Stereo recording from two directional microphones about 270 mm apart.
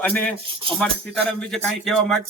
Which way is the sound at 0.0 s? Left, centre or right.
Centre.